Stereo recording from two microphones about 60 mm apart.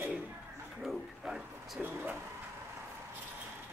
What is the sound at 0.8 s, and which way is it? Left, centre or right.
Speech, centre.